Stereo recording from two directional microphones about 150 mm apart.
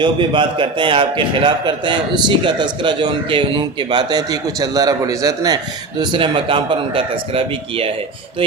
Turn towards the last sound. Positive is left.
turn(degrees=-40)  # may be behind; listen again after turning